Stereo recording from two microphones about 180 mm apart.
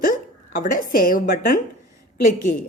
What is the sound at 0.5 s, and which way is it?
A woman's voice, 45° left (ahead or behind).